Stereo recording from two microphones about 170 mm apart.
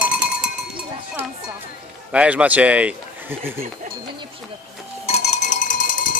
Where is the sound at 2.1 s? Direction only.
10° right (ahead or behind).